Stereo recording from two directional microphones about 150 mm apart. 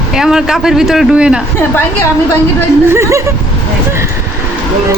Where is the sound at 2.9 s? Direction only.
20° right (ahead or behind).